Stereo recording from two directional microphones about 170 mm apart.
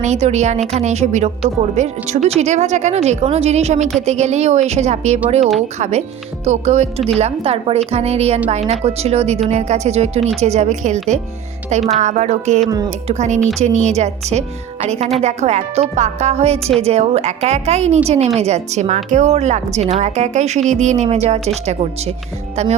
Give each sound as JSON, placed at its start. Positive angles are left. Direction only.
{"t": 0.0, "sound": "speech", "side_deg": -40}
{"t": 6.4, "sound": "speech", "side_deg": -40}